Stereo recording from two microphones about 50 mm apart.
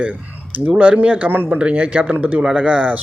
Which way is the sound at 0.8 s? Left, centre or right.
Right.